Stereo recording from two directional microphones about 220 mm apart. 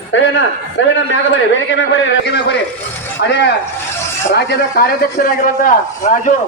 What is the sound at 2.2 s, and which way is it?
Speech, 50° left (ahead or behind).